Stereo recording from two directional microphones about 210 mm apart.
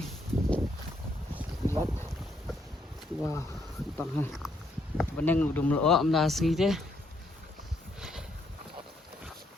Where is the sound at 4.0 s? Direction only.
5° left (ahead or behind).